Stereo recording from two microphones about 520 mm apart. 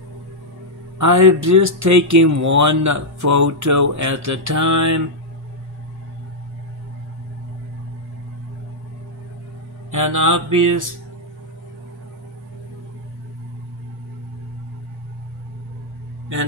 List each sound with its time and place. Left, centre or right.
0.9 s speech: right
9.8 s mantra: right